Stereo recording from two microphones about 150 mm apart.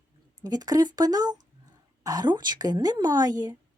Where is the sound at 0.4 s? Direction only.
25° right (ahead or behind).